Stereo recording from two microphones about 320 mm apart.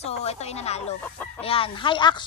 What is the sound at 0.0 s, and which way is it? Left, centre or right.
A child's voice, centre.